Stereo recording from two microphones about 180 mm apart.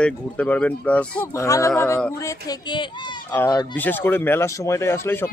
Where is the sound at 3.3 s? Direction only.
10° left (ahead or behind).